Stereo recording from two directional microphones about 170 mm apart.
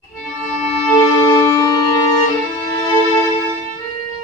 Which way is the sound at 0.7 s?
30° left (ahead or behind).